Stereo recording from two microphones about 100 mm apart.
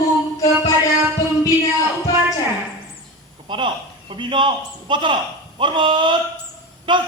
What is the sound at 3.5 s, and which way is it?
A man's voice, 50° right (ahead or behind).